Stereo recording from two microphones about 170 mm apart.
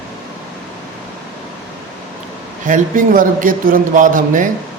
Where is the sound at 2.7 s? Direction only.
55° right (ahead or behind).